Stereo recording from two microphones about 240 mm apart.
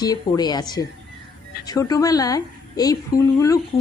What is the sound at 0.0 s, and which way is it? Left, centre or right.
Speech, centre.